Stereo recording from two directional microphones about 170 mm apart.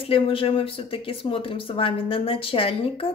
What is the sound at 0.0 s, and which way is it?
Speech, 30° left (ahead or behind).